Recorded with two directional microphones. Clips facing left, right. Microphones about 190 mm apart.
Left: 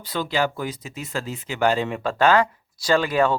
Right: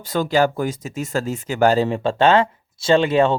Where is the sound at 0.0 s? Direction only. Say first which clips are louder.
Right 6 dB; 45° right (ahead or behind).